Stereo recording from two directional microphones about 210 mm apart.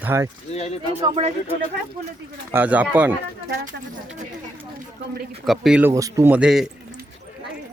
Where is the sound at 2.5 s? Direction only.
10° right (ahead or behind).